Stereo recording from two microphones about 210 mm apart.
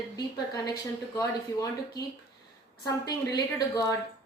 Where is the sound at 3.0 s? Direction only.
20° left (ahead or behind).